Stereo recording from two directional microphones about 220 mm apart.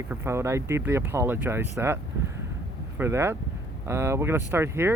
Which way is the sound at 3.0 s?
10° right (ahead or behind).